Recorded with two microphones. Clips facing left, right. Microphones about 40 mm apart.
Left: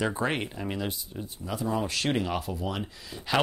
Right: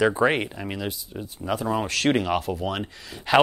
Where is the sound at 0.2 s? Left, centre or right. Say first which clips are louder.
Right 7 dB; right.